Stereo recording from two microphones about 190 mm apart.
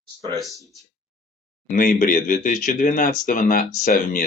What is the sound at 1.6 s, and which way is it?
Speech, 45° left (ahead or behind).